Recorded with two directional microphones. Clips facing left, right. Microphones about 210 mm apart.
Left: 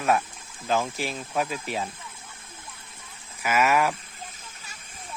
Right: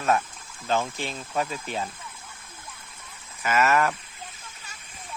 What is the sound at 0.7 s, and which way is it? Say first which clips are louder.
Speech: left 1 dB; 5° left (ahead or behind).